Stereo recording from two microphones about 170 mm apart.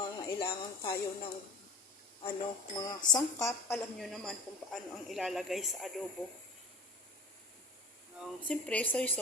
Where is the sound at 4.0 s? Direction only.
Centre (ahead or behind).